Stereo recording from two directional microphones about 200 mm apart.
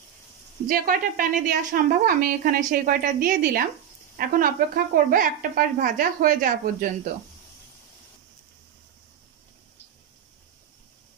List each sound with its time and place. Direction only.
0.7 s a woman's voice: 45° right (ahead or behind)